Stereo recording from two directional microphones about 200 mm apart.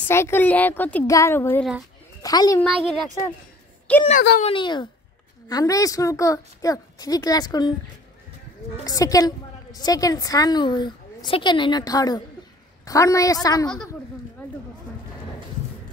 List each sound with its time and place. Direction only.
0.1 s a woman's voice: 10° left (ahead or behind)
3.9 s a woman's voice: 5° left (ahead or behind)
4.4 s a woman's voice: 25° left (ahead or behind)
8.8 s a woman's voice: 15° left (ahead or behind)